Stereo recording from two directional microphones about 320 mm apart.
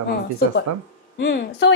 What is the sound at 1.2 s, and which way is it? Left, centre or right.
Speech, left.